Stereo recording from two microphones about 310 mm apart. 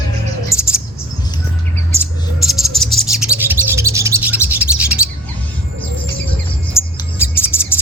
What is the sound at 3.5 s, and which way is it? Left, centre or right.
Bird, centre.